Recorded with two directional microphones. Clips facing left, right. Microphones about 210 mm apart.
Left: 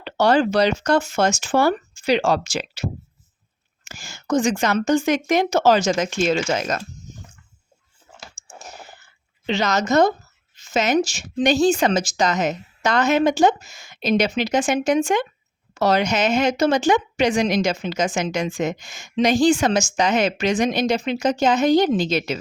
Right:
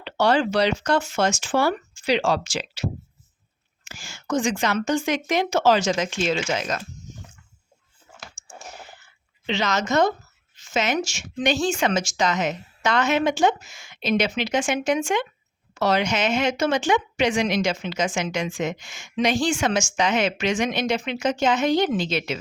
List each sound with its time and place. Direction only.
0.0 s speech: 40° left (ahead or behind)
3.8 s speech: 40° left (ahead or behind)
8.4 s a sound: 40° left (ahead or behind)
9.5 s speech: 40° left (ahead or behind)